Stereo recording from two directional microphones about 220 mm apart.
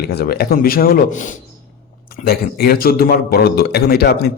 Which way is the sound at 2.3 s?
45° left (ahead or behind).